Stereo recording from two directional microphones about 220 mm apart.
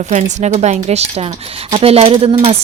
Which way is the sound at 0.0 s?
30° right (ahead or behind).